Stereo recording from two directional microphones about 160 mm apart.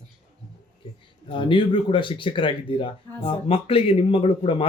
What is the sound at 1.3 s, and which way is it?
Speech, 30° left (ahead or behind).